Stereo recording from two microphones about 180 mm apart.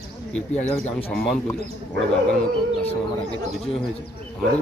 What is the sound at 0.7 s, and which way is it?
Speech, 5° left (ahead or behind).